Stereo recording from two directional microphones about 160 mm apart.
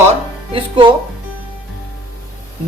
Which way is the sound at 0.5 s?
30° right (ahead or behind).